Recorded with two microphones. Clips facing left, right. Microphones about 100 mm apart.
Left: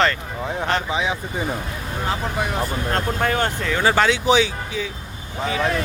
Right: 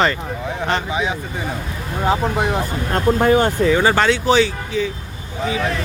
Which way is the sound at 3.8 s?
5° left (ahead or behind).